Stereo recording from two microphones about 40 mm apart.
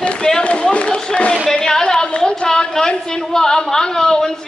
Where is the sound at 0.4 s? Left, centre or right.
Left.